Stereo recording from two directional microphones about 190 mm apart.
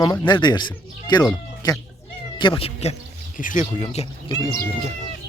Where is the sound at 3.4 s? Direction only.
45° left (ahead or behind).